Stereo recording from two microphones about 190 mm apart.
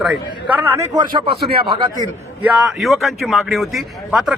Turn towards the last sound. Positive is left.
turn(degrees=0)  # may be behind; listen again after turning